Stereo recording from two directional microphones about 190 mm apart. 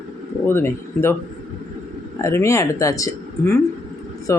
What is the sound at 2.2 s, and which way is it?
Speech, 15° left (ahead or behind).